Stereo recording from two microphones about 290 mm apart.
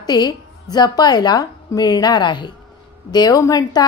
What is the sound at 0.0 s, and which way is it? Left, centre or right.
A woman's voice, centre.